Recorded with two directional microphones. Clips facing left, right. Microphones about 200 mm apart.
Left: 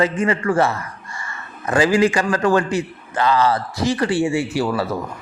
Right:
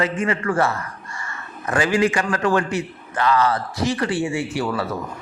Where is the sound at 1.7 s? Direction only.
30° left (ahead or behind).